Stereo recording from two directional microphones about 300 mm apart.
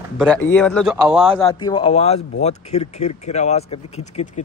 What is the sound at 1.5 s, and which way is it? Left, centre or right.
Speech, centre.